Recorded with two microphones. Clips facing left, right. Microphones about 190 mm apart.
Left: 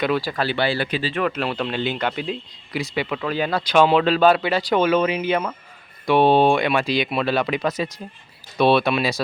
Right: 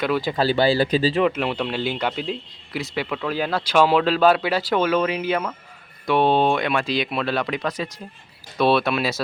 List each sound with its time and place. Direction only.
0.2 s speech: 20° right (ahead or behind)
0.4 s speech: 35° right (ahead or behind)
1.2 s speech: 15° right (ahead or behind)